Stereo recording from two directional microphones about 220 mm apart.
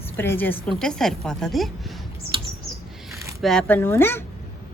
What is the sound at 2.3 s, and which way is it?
Bird, 20° right (ahead or behind).